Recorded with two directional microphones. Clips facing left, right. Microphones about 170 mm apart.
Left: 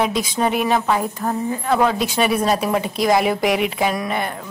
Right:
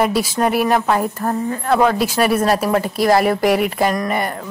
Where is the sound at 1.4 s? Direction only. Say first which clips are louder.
Right 1 dB; 15° left (ahead or behind).